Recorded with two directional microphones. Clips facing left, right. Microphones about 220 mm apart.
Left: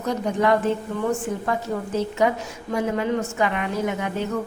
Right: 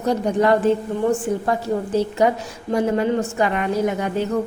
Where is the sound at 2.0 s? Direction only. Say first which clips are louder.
Right 2 dB; 35° right (ahead or behind).